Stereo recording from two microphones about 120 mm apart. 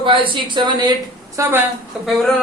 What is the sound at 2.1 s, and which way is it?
Speech, centre (ahead or behind).